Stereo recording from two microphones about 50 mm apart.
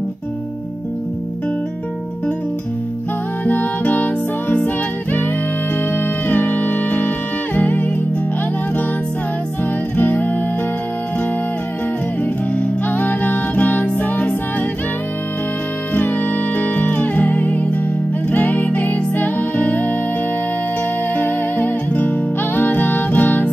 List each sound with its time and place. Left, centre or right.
3.4 s music: left
5.9 s music: left
9.9 s music: left
12.5 s music: left
15.9 s music: left
21.2 s music: left